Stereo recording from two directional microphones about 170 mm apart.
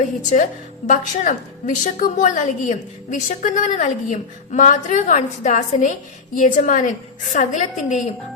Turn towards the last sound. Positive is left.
turn(degrees=45)  # may be behind; listen again after turning